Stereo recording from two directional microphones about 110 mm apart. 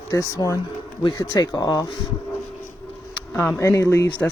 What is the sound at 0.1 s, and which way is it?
Speech, 30° left (ahead or behind).